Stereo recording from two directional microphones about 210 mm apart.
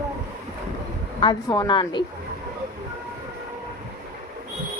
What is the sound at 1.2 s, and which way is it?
Speech, 20° left (ahead or behind).